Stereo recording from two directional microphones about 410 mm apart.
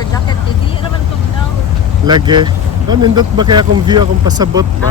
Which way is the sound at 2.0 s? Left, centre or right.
Centre.